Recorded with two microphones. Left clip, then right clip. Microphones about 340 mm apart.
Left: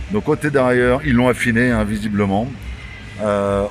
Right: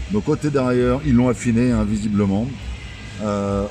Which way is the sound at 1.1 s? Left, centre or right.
Left.